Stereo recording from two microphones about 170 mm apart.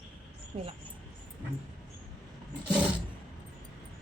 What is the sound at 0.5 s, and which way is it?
Speech, 35° right (ahead or behind).